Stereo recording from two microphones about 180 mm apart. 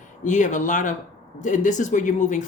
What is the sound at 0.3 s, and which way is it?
Speech, 45° left (ahead or behind).